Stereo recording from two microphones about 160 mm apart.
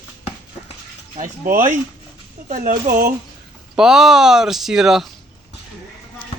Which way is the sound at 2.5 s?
55° right (ahead or behind).